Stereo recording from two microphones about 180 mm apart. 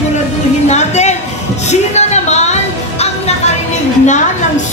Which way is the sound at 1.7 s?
40° left (ahead or behind).